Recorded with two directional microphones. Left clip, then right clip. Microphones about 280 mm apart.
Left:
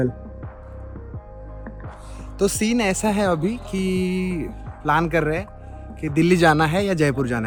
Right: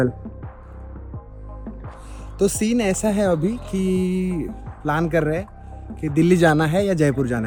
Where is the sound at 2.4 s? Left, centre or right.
Centre.